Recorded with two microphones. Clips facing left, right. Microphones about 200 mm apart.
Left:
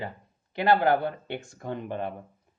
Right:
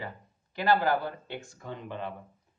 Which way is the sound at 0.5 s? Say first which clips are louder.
Left 4 dB; 60° left (ahead or behind).